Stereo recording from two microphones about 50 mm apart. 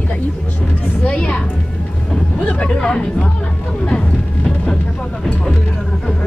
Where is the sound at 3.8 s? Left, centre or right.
Centre.